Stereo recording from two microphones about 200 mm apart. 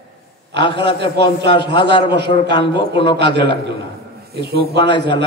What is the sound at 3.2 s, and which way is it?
Speech, 55° right (ahead or behind).